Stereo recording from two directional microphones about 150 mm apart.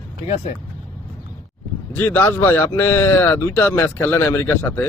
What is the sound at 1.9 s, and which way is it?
Speech, 15° left (ahead or behind).